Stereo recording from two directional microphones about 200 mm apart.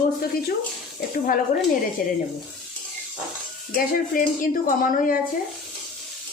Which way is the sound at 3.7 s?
45° left (ahead or behind).